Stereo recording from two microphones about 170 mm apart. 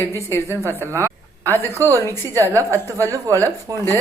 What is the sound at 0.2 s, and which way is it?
Speech, 15° left (ahead or behind).